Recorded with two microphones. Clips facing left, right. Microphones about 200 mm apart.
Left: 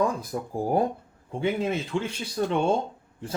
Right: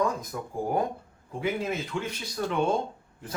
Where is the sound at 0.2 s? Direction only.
30° left (ahead or behind).